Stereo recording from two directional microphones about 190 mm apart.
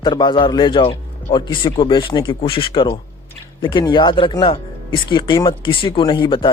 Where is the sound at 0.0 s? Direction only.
25° left (ahead or behind).